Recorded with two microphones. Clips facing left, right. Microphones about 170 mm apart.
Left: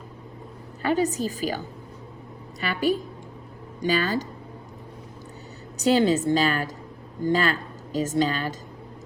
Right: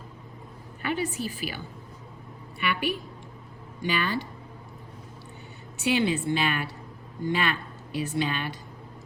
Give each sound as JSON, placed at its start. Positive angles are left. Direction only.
{"t": 0.8, "sound": "a woman's voice", "side_deg": 40}
{"t": 5.7, "sound": "a woman's voice", "side_deg": 40}